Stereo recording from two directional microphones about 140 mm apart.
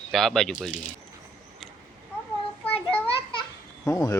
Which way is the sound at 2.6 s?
10° left (ahead or behind).